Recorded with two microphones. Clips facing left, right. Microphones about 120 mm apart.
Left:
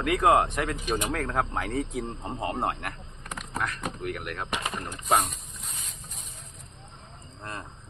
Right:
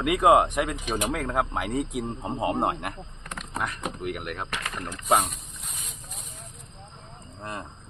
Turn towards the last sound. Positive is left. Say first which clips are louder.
# right 3 dB
turn(degrees=-15)  # may be behind; listen again after turning